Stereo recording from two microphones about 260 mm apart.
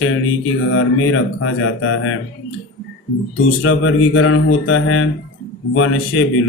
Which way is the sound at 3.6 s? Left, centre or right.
Left.